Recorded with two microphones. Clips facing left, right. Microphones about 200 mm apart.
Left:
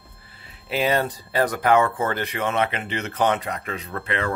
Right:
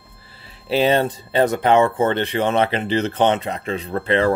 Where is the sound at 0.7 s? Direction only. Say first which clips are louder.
Right 5 dB; 30° right (ahead or behind).